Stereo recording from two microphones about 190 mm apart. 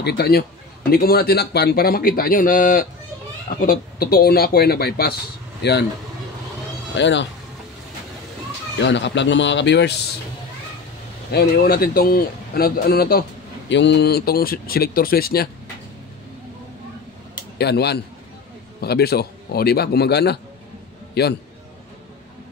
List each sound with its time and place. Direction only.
0.0 s a man's voice: 55° left (ahead or behind)
7.0 s speech: 70° left (ahead or behind)
8.7 s speech: 65° left (ahead or behind)
11.3 s a man's voice: 50° left (ahead or behind)
13.7 s a man's voice: 70° left (ahead or behind); by 15.4 s 50° left (ahead or behind)
17.6 s a man's voice: 60° left (ahead or behind)